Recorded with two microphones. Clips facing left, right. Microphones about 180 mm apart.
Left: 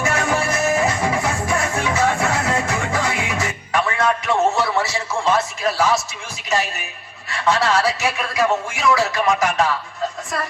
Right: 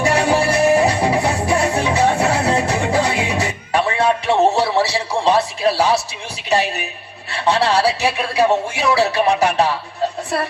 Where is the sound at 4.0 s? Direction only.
30° right (ahead or behind).